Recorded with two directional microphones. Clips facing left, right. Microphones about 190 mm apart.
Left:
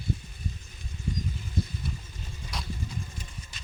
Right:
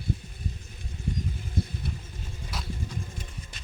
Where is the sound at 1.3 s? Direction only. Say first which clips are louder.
Right 1 dB; 55° right (ahead or behind).